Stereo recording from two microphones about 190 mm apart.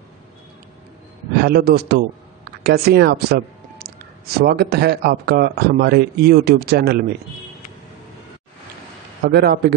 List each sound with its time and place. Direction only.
1.4 s speech: 55° right (ahead or behind)
9.2 s speech: 55° right (ahead or behind)